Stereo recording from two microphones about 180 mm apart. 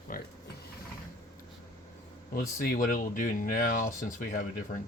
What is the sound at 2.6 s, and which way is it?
Speech, 50° left (ahead or behind).